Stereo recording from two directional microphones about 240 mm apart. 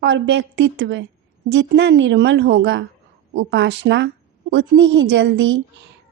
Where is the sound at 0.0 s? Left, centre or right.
Right.